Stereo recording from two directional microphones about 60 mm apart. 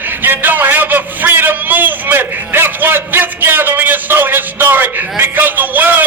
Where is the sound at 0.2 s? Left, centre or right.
Right.